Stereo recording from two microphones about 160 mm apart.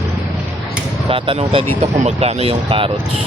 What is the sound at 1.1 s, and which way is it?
Speech, 35° right (ahead or behind).